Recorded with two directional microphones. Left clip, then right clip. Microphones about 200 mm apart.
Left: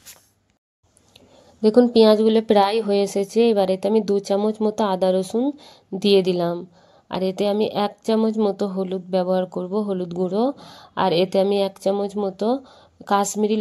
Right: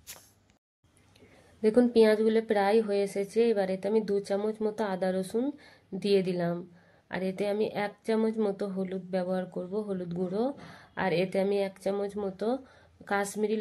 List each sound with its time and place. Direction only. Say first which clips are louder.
1.8 s a woman's voice: left 8 dB; 30° left (ahead or behind)